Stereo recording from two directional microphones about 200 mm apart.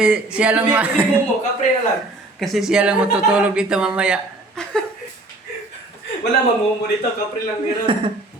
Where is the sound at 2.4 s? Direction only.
Centre (ahead or behind).